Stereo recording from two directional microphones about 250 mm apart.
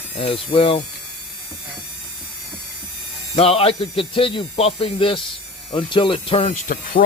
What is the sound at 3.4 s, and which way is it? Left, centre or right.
Speech, left.